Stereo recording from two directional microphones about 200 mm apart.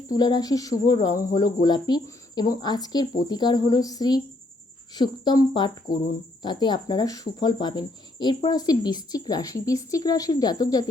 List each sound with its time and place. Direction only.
0.1 s speech: 20° left (ahead or behind)